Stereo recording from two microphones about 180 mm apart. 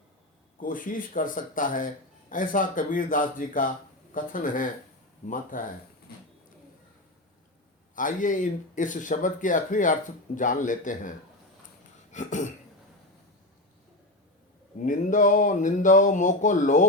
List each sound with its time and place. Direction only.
0.6 s speech: 50° left (ahead or behind)
7.9 s speech: 45° left (ahead or behind)
12.1 s speech: 45° left (ahead or behind)
14.8 s speech: 45° left (ahead or behind)